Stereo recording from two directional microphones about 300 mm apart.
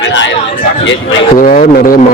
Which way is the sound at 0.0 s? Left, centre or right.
Left.